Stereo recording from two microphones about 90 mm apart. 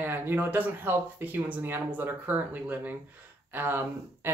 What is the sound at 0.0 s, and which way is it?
Speech, 25° right (ahead or behind).